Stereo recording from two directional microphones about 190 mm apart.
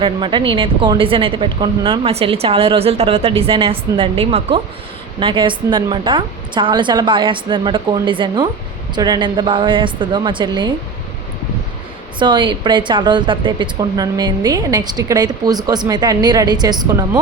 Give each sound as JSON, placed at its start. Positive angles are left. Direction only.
{"t": 0.0, "sound": "a woman's voice", "side_deg": -25}
{"t": 12.2, "sound": "a woman's voice", "side_deg": -25}